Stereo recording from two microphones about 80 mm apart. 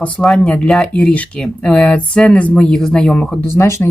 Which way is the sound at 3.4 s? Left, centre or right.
Left.